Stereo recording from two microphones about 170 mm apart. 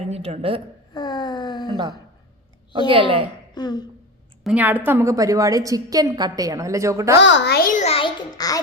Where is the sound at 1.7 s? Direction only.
25° right (ahead or behind).